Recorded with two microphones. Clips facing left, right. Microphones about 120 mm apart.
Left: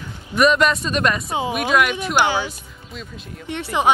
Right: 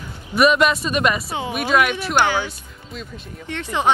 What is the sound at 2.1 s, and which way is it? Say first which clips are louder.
Speech: even; 15° left (ahead or behind).